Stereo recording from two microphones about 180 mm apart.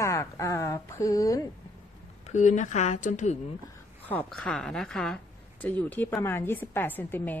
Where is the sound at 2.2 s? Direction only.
40° left (ahead or behind).